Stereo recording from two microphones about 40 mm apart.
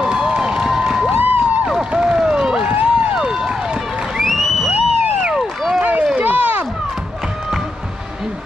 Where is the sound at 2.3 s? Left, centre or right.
Right.